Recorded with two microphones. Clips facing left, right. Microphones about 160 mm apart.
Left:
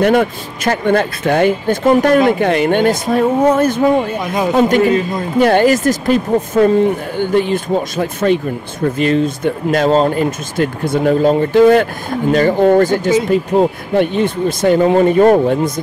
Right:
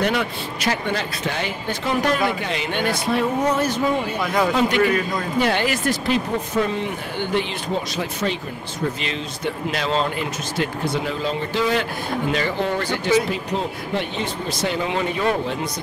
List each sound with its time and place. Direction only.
0.0 s speech: 50° left (ahead or behind)
4.2 s a man's voice: 20° left (ahead or behind)
4.5 s speech: 45° left (ahead or behind)
4.8 s a man's voice: 25° left (ahead or behind)
5.4 s speech: 45° left (ahead or behind)